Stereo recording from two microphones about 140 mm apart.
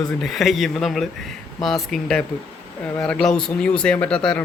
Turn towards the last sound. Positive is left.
turn(degrees=5)  # may be behind; listen again after turning